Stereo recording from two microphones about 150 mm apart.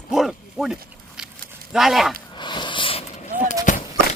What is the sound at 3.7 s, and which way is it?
Clip-clop, 60° left (ahead or behind).